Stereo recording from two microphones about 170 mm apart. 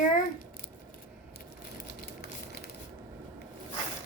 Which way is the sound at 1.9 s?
70° left (ahead or behind).